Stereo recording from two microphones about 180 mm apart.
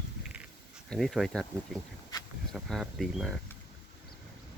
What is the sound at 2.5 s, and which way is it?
Speech, centre (ahead or behind).